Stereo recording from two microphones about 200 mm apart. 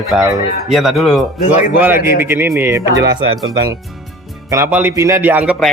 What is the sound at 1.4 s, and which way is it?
Speech, 35° left (ahead or behind).